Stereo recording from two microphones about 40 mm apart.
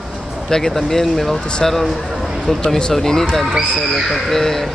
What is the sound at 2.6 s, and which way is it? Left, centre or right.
Speech, centre.